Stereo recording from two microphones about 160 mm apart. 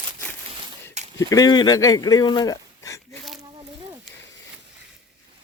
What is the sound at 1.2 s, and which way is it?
Speech, 20° left (ahead or behind).